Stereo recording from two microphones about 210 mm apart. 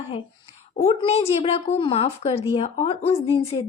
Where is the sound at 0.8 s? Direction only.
30° left (ahead or behind).